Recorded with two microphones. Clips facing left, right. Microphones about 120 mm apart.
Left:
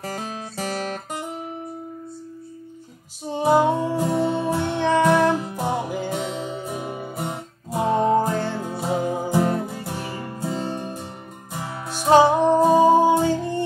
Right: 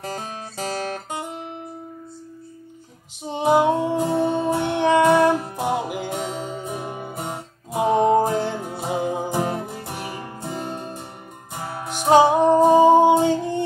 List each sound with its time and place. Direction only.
0.1 s music: 25° right (ahead or behind)
3.3 s music: 20° right (ahead or behind)